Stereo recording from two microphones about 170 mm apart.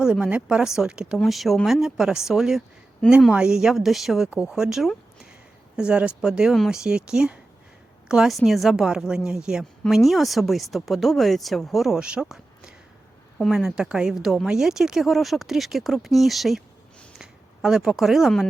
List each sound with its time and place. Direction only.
0.0 s a woman's voice: 5° right (ahead or behind)